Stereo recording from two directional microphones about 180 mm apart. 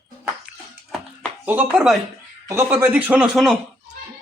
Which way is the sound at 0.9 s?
Centre (ahead or behind).